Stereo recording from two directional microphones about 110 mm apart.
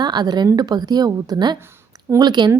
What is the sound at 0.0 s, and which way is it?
A woman's voice, 40° right (ahead or behind).